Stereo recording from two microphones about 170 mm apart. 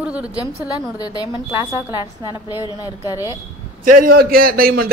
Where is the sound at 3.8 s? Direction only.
55° right (ahead or behind).